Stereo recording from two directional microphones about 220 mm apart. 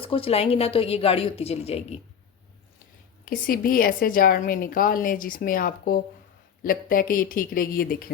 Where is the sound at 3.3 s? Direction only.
40° left (ahead or behind).